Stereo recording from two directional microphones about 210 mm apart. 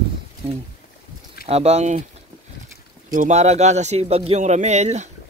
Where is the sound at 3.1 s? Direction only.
35° right (ahead or behind).